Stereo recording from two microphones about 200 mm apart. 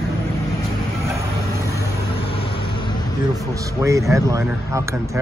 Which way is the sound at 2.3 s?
25° left (ahead or behind).